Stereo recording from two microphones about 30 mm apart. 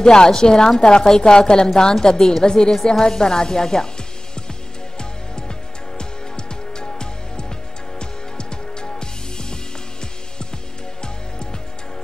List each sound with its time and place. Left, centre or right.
0.0 s a woman's voice: left
5.9 s music: left